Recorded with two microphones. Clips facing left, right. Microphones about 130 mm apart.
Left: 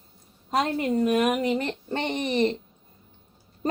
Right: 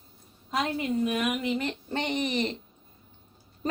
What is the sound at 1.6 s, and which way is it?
Speech, 35° left (ahead or behind).